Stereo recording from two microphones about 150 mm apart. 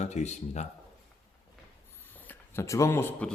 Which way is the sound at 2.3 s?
20° left (ahead or behind).